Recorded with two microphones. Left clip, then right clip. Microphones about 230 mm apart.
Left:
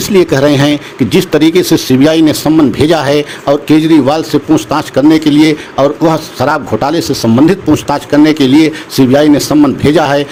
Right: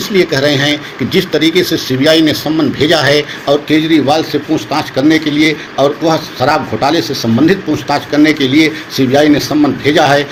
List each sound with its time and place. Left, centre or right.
0.1 s speech: left